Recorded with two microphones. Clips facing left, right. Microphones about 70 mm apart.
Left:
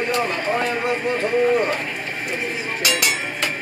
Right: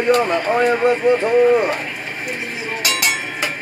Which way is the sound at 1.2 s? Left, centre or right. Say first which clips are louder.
Right 4 dB; centre.